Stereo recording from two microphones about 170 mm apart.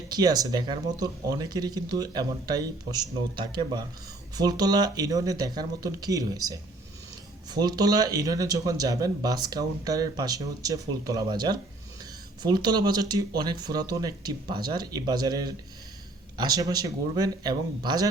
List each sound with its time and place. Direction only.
0.1 s speech: 20° right (ahead or behind)